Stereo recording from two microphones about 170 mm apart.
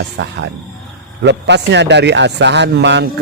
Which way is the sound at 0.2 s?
90° right.